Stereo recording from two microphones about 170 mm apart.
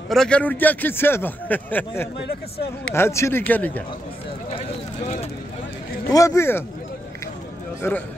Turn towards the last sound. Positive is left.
turn(degrees=15)  # may be behind; listen again after turning